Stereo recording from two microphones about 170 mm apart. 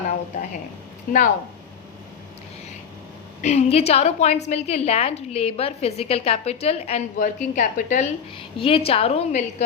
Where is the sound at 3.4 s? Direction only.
40° left (ahead or behind).